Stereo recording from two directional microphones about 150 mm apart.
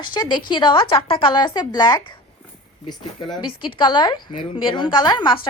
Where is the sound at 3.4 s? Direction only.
35° left (ahead or behind).